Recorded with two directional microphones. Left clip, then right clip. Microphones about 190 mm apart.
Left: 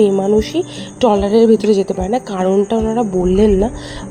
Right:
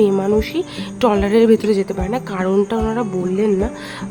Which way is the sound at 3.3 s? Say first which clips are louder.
Left 5 dB; 15° left (ahead or behind).